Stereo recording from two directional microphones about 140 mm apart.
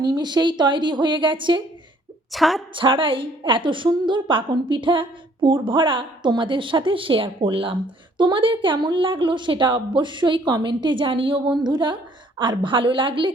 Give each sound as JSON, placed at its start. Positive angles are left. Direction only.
{"t": 0.0, "sound": "a woman's voice", "side_deg": -30}
{"t": 2.3, "sound": "a woman's voice", "side_deg": 0}
{"t": 2.7, "sound": "a woman's voice", "side_deg": -35}